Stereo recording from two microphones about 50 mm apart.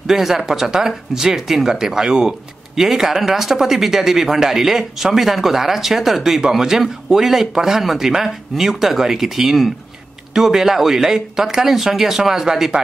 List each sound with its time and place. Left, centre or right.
0.0 s speech: centre